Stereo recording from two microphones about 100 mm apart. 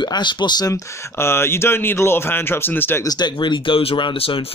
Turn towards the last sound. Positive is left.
turn(degrees=70)  # may be behind; listen again after turning